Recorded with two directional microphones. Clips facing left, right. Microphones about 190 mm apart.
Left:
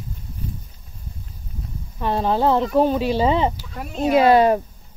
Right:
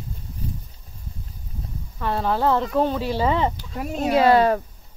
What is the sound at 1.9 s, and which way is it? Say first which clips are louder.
Speech: left 3 dB; 20° left (ahead or behind).